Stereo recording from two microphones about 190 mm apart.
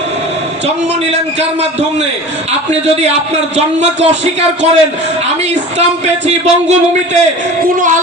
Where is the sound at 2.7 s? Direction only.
35° right (ahead or behind).